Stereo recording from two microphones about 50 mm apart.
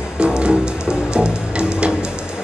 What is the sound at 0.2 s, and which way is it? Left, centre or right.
Music, centre.